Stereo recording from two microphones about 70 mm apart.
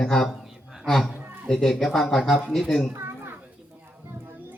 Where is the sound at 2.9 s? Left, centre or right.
Right.